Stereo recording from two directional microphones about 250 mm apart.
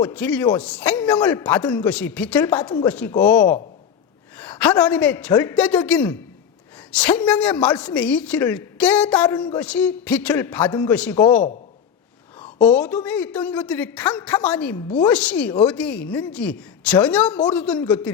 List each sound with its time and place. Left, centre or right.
0.0 s a man's voice: centre
12.6 s speech: centre